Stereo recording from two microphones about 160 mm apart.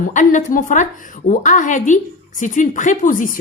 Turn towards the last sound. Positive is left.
turn(degrees=55)  # may be behind; listen again after turning